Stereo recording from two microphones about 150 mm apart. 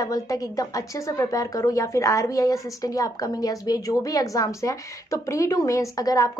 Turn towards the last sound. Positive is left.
turn(degrees=25)  # may be behind; listen again after turning